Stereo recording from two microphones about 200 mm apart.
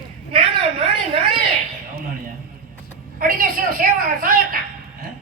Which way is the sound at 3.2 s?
45° right (ahead or behind).